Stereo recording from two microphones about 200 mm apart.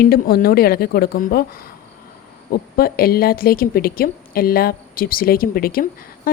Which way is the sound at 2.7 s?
50° left (ahead or behind).